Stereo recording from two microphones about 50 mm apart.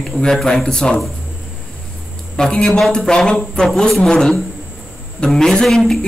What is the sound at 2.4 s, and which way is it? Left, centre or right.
Speech, centre.